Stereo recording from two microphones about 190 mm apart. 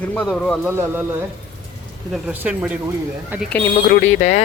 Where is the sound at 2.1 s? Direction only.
5° right (ahead or behind).